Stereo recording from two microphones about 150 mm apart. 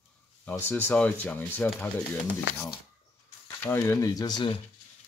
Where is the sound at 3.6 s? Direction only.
15° left (ahead or behind); by 4.6 s 30° left (ahead or behind).